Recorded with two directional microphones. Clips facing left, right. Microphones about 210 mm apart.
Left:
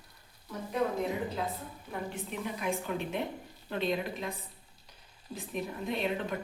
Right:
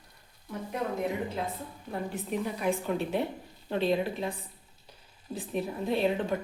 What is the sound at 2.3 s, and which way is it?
Speech, 40° right (ahead or behind).